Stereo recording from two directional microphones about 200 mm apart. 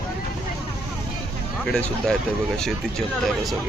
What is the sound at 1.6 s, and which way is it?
Speech, 5° left (ahead or behind).